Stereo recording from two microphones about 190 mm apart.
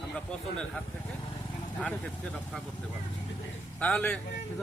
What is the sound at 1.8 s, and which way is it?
Speech, 5° left (ahead or behind).